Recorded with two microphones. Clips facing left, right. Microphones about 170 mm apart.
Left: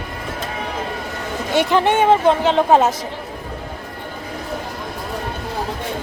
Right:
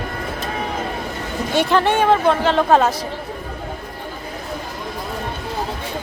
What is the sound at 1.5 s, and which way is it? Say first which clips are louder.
Speech: left 1 dB; 20° left (ahead or behind).